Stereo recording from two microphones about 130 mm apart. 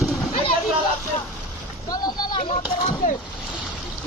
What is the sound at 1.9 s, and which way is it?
Speech, 30° left (ahead or behind).